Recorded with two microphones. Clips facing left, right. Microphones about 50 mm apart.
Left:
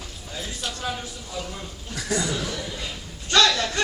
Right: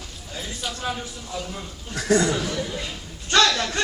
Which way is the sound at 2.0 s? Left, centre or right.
Right.